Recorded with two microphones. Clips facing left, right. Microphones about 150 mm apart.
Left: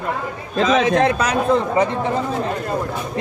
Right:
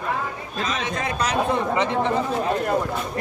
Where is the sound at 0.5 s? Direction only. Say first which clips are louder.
Left 12 dB; 90° left; by 1.2 s 70° left (ahead or behind).